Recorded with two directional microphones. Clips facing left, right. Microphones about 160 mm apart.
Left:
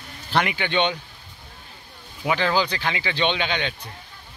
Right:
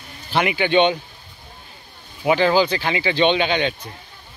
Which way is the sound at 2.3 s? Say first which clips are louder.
Right 6 dB; 15° right (ahead or behind).